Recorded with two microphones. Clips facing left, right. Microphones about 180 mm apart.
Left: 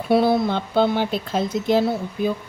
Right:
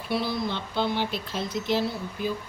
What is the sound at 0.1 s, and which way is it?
Speech, 55° left (ahead or behind).